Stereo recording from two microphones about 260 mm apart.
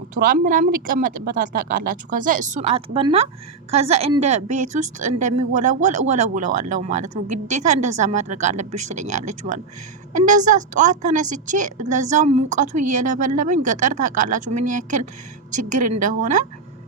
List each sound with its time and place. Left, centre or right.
0.1 s a woman's voice: right